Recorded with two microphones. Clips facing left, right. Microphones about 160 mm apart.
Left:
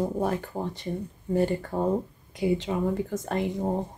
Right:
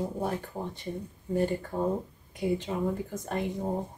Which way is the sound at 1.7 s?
60° left (ahead or behind).